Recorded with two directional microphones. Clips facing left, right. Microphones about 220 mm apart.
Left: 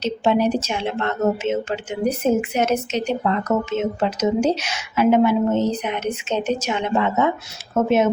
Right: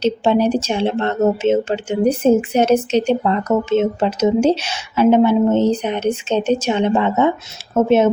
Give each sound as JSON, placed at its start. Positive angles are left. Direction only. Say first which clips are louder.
{"t": 0.0, "sound": "a woman's voice", "louder": "right 3 dB", "side_deg": -30}